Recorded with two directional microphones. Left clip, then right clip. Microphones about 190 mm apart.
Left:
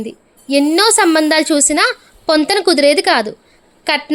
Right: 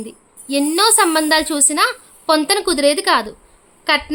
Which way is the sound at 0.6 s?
10° left (ahead or behind).